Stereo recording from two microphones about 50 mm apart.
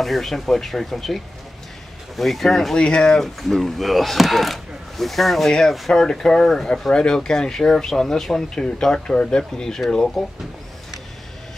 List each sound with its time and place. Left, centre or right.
0.0 s speech: centre
2.8 s speech: centre
3.4 s speech: centre
8.6 s speech: centre